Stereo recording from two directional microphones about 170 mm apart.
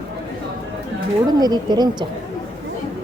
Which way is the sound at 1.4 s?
25° right (ahead or behind).